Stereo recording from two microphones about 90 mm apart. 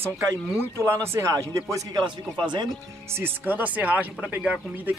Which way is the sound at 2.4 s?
60° right (ahead or behind).